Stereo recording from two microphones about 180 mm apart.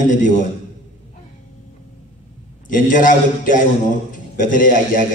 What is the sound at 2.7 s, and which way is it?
A man's voice, 45° left (ahead or behind).